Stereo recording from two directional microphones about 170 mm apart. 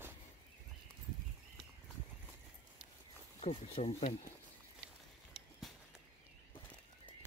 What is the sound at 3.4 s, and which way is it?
Speech, 40° left (ahead or behind).